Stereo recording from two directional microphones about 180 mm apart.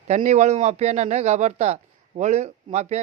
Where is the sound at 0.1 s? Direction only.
40° right (ahead or behind).